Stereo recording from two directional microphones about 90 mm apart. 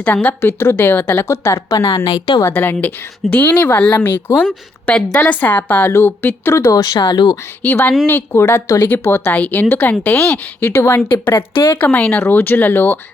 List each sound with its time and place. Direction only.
0.0 s a woman's voice: 20° left (ahead or behind); by 2.4 s 50° left (ahead or behind)
2.5 s a woman's voice: 20° left (ahead or behind)
6.6 s speech: 40° left (ahead or behind)
7.0 s speech: 55° left (ahead or behind)
7.4 s a woman's voice: 25° left (ahead or behind)
8.9 s a woman's voice: 25° left (ahead or behind)
11.8 s a woman's voice: 15° left (ahead or behind)